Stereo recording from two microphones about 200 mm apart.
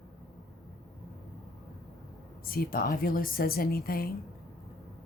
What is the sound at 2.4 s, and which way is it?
A woman's voice, 45° left (ahead or behind).